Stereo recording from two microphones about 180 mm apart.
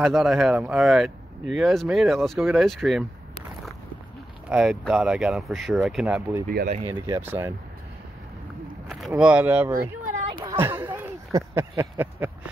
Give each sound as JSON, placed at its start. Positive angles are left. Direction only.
{"t": 0.0, "sound": "speech", "side_deg": 0}
{"t": 4.5, "sound": "speech", "side_deg": -5}
{"t": 6.4, "sound": "speech", "side_deg": -50}
{"t": 6.9, "sound": "speech", "side_deg": -15}
{"t": 8.8, "sound": "a sound", "side_deg": 0}
{"t": 9.2, "sound": "speech", "side_deg": -10}